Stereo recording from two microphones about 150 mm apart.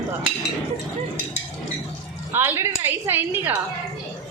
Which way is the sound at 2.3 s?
15° right (ahead or behind).